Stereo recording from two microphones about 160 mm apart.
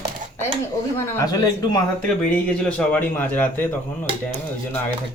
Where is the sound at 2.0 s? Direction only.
5° left (ahead or behind).